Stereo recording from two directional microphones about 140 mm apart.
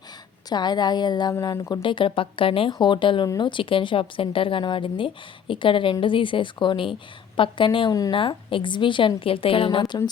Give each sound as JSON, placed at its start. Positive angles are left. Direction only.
{"t": 0.5, "sound": "a woman's voice", "side_deg": 30}